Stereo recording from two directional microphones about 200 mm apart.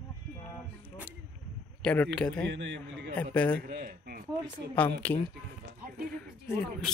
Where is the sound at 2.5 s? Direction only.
60° right (ahead or behind).